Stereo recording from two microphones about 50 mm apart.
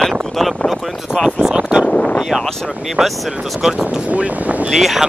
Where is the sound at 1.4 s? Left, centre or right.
Centre.